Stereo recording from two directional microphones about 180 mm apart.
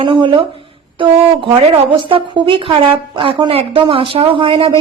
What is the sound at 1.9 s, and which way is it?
A woman's voice, 30° right (ahead or behind).